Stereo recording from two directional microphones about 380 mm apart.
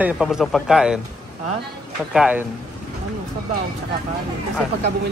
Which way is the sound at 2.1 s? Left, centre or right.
Centre.